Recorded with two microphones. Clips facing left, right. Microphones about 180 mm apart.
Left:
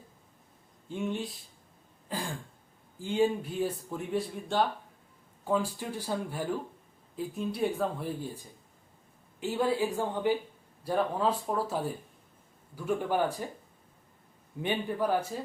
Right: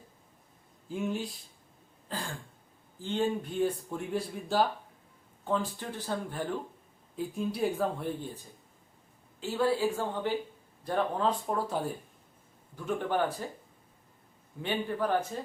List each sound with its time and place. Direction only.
0.9 s speech: centre (ahead or behind)
2.0 s a sound: 10° left (ahead or behind)
3.0 s speech: 10° left (ahead or behind)
9.4 s speech: 15° left (ahead or behind)
14.6 s speech: 15° left (ahead or behind)